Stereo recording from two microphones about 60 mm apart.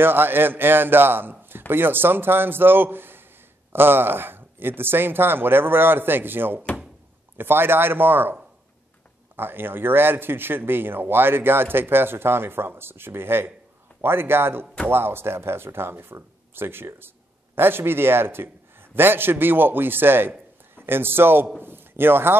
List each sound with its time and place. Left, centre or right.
0.0 s speech: right
9.4 s a man's voice: right